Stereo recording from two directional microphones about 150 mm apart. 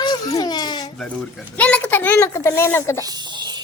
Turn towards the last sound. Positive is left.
turn(degrees=-30)  # may be behind; listen again after turning